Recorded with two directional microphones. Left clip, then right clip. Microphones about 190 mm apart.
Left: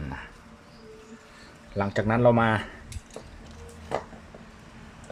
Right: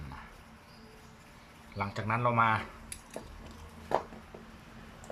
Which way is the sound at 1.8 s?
35° left (ahead or behind).